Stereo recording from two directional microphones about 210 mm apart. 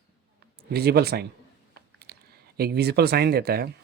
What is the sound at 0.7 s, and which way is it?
Speech, 50° right (ahead or behind).